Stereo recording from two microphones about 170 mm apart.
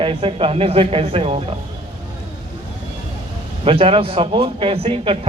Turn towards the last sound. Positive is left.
turn(degrees=-30)  # may be behind; listen again after turning